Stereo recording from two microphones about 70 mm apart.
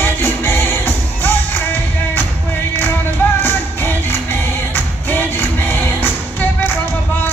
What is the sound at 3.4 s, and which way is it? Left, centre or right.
Music, left.